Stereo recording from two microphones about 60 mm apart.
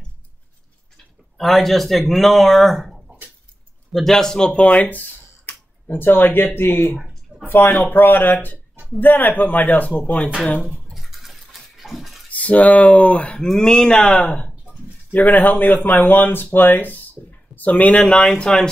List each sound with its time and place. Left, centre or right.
0.9 s speech: centre
5.5 s speech: left
10.6 s a sound: centre
12.3 s speech: left
13.4 s speech: centre; by 18.0 s left
18.1 s speech: centre